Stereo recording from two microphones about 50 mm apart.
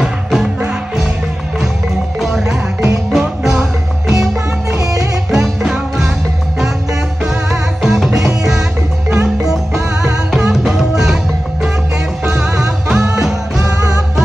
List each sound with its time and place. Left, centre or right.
0.0 s music: centre
2.1 s music: centre
7.2 s music: centre
12.4 s music: centre